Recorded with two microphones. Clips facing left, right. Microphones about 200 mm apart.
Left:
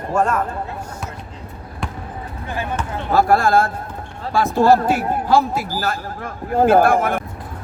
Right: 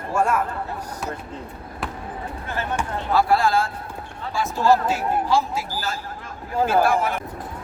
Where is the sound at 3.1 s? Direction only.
45° left (ahead or behind).